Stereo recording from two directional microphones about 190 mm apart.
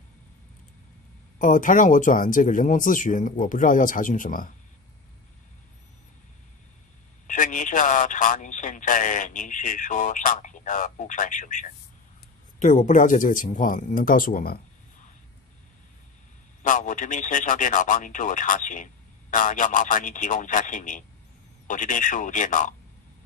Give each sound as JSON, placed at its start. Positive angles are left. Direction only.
{"t": 1.4, "sound": "speech", "side_deg": 45}
{"t": 7.2, "sound": "speech", "side_deg": 40}
{"t": 16.6, "sound": "speech", "side_deg": 40}